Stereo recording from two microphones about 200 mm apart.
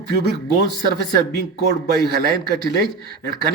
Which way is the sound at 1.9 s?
50° right (ahead or behind).